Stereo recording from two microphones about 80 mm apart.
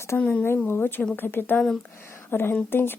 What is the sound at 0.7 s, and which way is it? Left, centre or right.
Speech, left.